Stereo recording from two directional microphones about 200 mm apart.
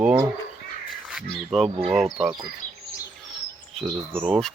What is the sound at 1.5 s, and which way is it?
Speech, centre (ahead or behind).